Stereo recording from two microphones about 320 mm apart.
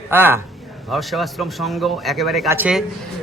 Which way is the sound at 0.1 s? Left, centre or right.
Centre.